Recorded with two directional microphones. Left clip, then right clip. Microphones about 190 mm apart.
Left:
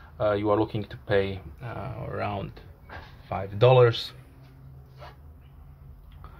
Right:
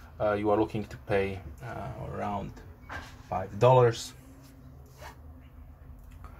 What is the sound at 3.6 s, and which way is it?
Speech, 35° left (ahead or behind).